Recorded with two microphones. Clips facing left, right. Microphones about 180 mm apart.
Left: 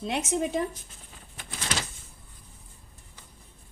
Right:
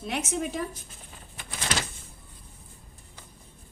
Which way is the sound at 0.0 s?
20° left (ahead or behind).